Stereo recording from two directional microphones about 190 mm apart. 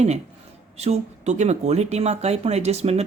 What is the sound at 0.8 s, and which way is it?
Speech, 35° right (ahead or behind).